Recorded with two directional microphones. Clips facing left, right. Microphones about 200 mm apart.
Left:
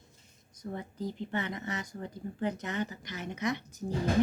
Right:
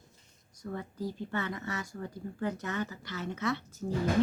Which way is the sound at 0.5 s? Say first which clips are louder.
Even; 20° left (ahead or behind).